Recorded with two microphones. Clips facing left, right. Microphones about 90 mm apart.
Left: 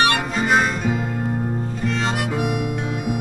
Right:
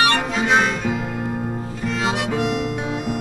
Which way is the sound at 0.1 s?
5° left (ahead or behind).